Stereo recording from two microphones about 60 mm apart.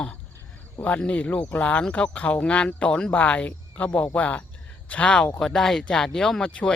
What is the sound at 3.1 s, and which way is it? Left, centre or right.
Speech, left.